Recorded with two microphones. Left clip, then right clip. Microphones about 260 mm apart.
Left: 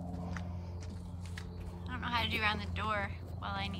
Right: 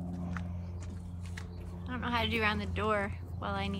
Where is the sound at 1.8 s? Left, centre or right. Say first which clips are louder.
Right 2 dB; centre.